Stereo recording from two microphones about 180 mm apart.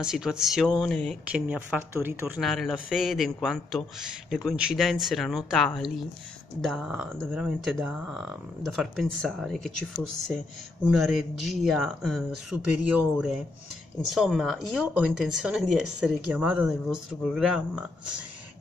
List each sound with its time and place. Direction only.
0.0 s speech: 5° right (ahead or behind)
1.3 s speech: 5° right (ahead or behind)
2.4 s speech: centre (ahead or behind)
14.1 s speech: centre (ahead or behind)